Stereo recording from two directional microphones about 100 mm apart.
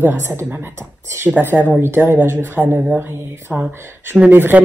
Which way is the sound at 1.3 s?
20° right (ahead or behind).